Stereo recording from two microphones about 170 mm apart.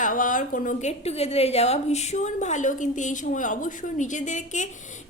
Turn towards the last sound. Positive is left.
turn(degrees=45)  # may be behind; listen again after turning